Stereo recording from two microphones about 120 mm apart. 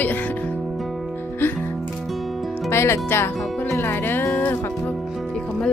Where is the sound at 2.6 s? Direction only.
20° left (ahead or behind).